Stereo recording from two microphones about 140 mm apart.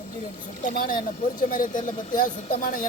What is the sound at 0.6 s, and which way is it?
Speech, 85° left.